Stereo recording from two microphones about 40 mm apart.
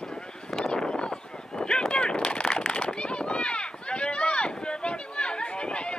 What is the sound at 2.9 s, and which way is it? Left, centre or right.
Run, left.